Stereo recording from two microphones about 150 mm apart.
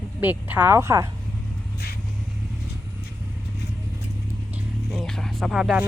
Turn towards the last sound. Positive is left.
turn(degrees=-5)  # may be behind; listen again after turning